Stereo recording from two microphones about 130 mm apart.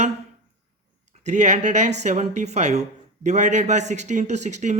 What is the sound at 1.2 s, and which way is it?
Speech, 65° right (ahead or behind).